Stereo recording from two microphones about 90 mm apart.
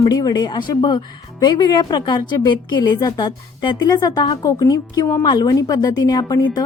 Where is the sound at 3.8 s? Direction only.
45° left (ahead or behind).